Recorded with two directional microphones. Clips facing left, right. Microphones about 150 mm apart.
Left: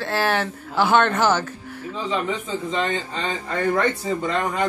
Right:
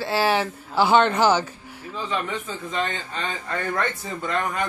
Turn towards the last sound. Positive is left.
turn(degrees=20)  # may be behind; listen again after turning